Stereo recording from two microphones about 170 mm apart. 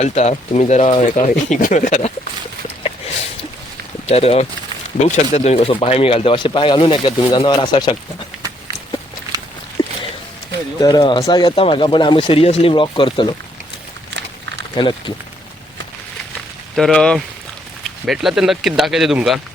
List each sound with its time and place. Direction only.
0.0 s speech: 40° left (ahead or behind)
4.1 s speech: 35° left (ahead or behind)
8.4 s a sound: 20° right (ahead or behind)
10.8 s speech: 25° left (ahead or behind)
14.8 s speech: 30° left (ahead or behind)
16.7 s speech: centre (ahead or behind)